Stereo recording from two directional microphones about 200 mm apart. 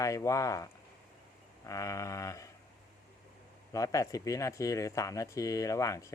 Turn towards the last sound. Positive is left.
turn(degrees=15)  # may be behind; listen again after turning